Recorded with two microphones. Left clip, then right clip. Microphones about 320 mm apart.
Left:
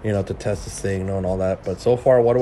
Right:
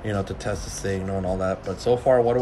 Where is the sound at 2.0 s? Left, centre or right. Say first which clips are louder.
Left 4 dB; left.